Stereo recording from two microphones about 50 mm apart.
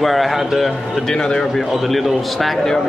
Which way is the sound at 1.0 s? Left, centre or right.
Centre.